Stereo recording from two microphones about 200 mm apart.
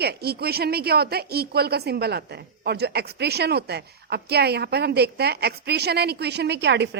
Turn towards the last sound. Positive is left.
turn(degrees=-60)  # may be behind; listen again after turning